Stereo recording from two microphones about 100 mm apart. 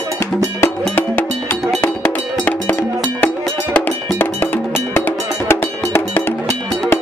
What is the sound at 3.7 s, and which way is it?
Cowbell, 20° left (ahead or behind).